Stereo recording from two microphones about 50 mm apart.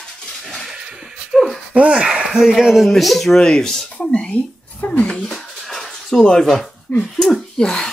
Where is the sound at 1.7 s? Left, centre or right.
Right.